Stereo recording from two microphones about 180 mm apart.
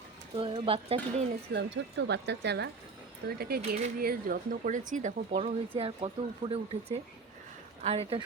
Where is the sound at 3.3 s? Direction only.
60° right (ahead or behind).